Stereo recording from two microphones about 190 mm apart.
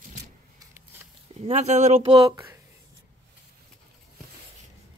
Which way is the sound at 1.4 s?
35° right (ahead or behind).